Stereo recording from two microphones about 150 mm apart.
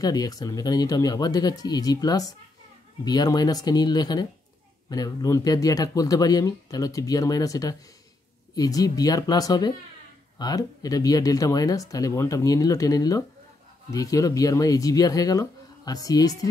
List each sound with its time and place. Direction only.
0.0 s speech: 25° left (ahead or behind)